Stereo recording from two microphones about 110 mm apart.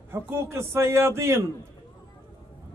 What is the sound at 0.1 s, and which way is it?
A man's voice, 25° right (ahead or behind).